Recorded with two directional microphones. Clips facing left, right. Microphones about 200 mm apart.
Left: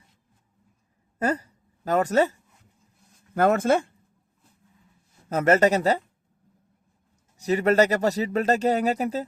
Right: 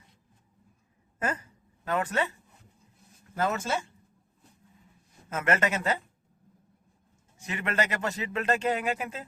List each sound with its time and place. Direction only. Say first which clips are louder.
1.2 s speech: left 7 dB; 35° left (ahead or behind)
3.3 s speech: left 9 dB; 55° left (ahead or behind)
5.3 s speech: left 8 dB; 40° left (ahead or behind)
7.3 s speech: left 11 dB; 40° left (ahead or behind)